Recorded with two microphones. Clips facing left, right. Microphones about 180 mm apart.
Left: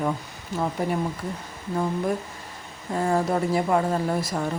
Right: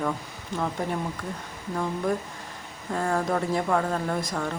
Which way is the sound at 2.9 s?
10° left (ahead or behind).